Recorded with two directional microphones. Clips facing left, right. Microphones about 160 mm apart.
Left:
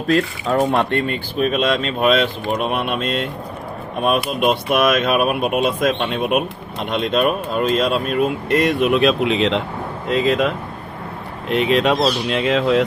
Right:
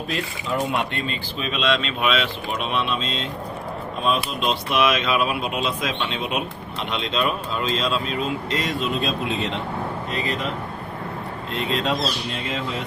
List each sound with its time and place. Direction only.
0.7 s speech: 60° left (ahead or behind); by 9.6 s 90° left
10.1 s speech: 75° left (ahead or behind)